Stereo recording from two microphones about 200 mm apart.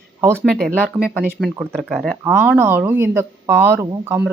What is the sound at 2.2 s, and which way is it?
Speech, 10° right (ahead or behind).